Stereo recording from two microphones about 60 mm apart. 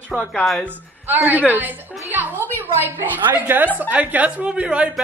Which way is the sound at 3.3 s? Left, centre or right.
Right.